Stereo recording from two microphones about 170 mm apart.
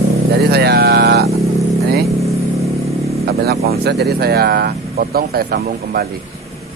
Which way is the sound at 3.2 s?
65° right (ahead or behind).